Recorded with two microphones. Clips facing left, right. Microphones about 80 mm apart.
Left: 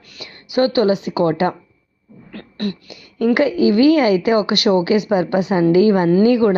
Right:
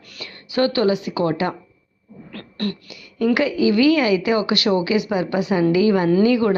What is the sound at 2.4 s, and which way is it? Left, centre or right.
Beatboxing, centre.